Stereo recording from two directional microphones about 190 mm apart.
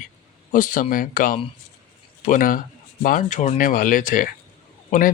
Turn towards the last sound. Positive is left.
turn(degrees=45)  # may be behind; listen again after turning